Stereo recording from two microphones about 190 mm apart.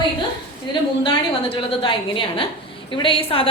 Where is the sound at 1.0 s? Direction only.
25° left (ahead or behind).